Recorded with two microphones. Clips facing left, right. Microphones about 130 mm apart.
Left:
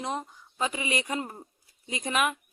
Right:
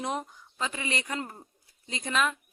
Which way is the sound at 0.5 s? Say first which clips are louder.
Left 3 dB; 15° left (ahead or behind).